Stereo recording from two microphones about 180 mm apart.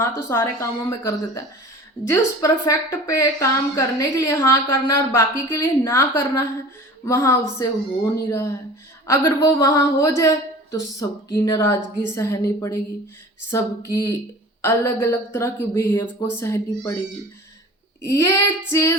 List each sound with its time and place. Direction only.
0.0 s a woman's voice: 15° left (ahead or behind)
18.0 s a woman's voice: 15° left (ahead or behind)